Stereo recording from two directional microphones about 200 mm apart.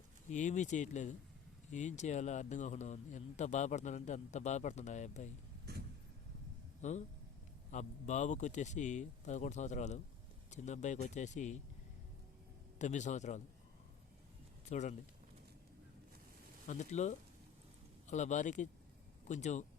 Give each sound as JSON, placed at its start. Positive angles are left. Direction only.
{"t": 0.3, "sound": "speech", "side_deg": 35}
{"t": 6.8, "sound": "speech", "side_deg": 40}
{"t": 12.8, "sound": "speech", "side_deg": 35}
{"t": 14.7, "sound": "speech", "side_deg": 35}
{"t": 16.6, "sound": "speech", "side_deg": 35}